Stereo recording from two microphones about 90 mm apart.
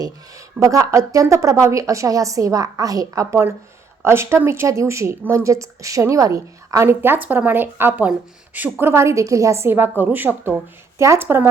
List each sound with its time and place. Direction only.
0.0 s a woman's voice: 40° right (ahead or behind)